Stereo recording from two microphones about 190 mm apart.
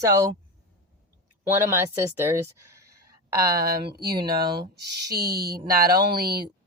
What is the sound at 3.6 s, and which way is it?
Speech, 50° right (ahead or behind).